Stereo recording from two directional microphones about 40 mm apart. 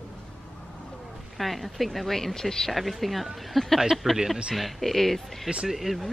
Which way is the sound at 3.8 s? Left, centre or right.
Centre.